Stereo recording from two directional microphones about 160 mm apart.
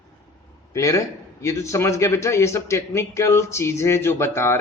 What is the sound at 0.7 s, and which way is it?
A man's voice, 20° left (ahead or behind).